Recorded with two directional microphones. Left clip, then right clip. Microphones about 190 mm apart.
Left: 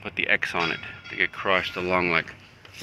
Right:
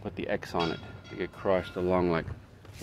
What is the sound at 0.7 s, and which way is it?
Speech, 30° right (ahead or behind).